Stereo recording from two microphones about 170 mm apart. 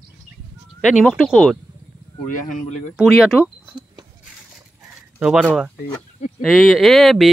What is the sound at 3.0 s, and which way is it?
Speech, centre (ahead or behind).